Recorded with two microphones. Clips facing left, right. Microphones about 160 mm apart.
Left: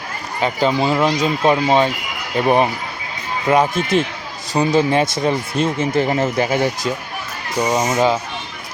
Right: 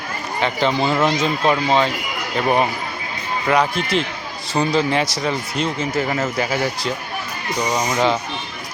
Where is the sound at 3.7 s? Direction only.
50° left (ahead or behind).